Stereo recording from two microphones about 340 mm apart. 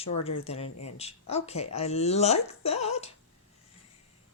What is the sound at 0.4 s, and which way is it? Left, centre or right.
Speech, centre.